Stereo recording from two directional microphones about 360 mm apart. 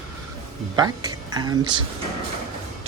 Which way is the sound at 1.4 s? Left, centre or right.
Centre.